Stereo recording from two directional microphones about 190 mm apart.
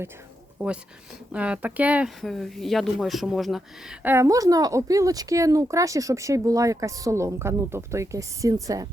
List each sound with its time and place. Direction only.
0.6 s speech: 10° right (ahead or behind)